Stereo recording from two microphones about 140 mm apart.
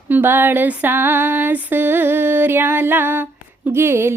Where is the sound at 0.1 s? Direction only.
15° right (ahead or behind).